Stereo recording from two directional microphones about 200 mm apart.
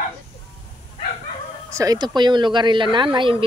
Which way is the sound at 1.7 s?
20° right (ahead or behind).